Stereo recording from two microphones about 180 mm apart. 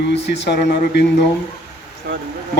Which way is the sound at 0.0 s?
70° left (ahead or behind).